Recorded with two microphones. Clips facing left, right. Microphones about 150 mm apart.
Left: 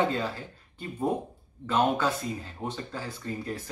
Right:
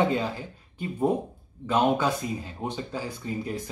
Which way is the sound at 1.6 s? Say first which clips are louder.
Right 2 dB; 15° right (ahead or behind).